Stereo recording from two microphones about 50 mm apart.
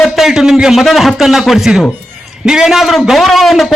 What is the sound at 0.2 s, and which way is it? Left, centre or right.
A man's voice, centre.